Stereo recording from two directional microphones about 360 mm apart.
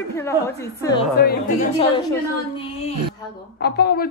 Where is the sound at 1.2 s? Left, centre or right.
Left.